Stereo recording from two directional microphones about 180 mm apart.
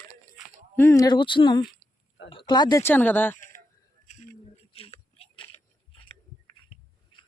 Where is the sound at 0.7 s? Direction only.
15° left (ahead or behind).